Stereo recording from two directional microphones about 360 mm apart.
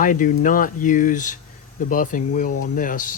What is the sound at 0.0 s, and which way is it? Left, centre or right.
Speech, left.